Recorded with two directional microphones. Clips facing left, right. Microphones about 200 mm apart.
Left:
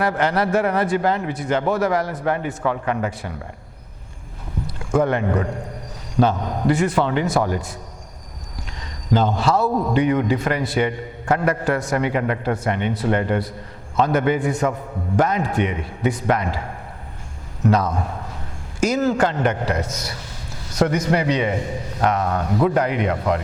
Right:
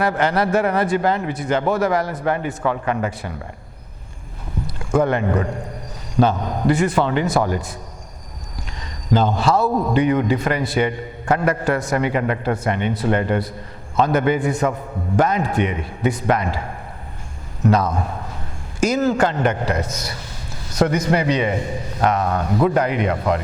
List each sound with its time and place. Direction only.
0.0 s a man's voice: 10° right (ahead or behind)
4.9 s speech: 15° right (ahead or behind)
6.7 s a man's voice: 10° right (ahead or behind)
9.4 s a man's voice: 10° right (ahead or behind)
9.6 s a man's voice: 30° right (ahead or behind)
9.9 s a man's voice: 15° right (ahead or behind)
17.8 s speech: 25° right (ahead or behind)
18.8 s a man's voice: 10° right (ahead or behind)